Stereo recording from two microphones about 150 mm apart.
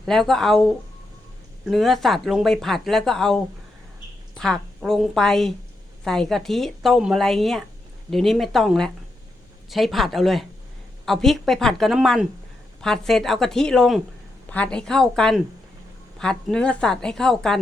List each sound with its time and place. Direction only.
0.0 s speech: centre (ahead or behind)